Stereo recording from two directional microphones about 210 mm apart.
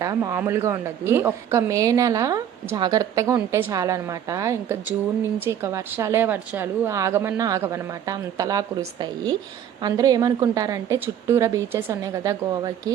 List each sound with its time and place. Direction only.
0.0 s a woman's voice: 15° right (ahead or behind)